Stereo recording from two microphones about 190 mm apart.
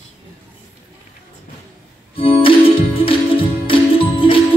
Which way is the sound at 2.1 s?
30° left (ahead or behind).